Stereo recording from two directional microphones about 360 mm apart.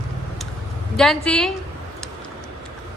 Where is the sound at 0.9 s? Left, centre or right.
Centre.